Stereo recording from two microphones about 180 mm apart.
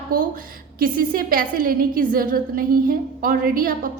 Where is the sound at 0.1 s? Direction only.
50° right (ahead or behind).